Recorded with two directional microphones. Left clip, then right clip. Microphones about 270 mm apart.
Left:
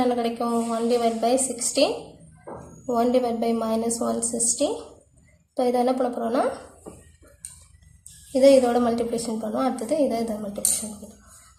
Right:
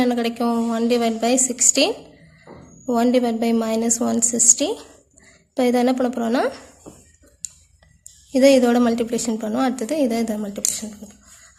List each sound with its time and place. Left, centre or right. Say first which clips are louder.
0.0 s a woman's voice: right 2 dB; right
8.3 s a woman's voice: right 2 dB; right